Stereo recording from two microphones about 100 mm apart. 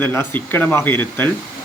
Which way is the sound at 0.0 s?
20° left (ahead or behind).